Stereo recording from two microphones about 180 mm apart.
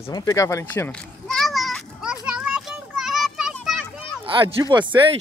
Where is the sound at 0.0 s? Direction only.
20° left (ahead or behind); by 3.8 s centre (ahead or behind).